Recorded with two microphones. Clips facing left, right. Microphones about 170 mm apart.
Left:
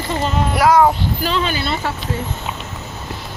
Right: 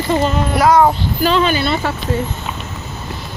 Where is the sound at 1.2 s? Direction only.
75° right (ahead or behind).